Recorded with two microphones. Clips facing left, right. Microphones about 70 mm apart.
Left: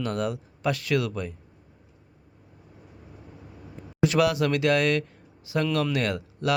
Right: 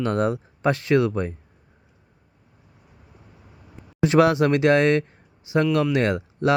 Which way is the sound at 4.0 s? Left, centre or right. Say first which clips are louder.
Right 5 dB; right.